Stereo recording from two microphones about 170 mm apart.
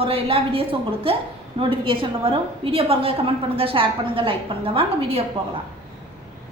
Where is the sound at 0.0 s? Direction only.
35° right (ahead or behind).